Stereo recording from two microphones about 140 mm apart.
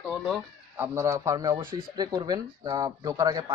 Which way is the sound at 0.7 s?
20° right (ahead or behind).